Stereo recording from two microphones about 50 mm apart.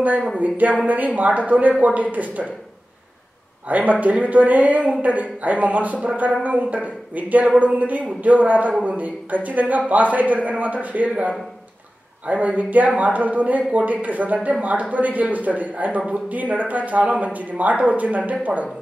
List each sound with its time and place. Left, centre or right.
0.4 s speech: right
3.6 s speech: right